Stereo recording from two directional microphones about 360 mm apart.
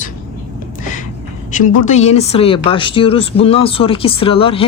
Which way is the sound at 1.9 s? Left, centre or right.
Centre.